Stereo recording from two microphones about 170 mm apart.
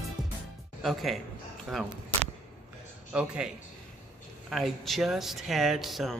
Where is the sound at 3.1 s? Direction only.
5° right (ahead or behind).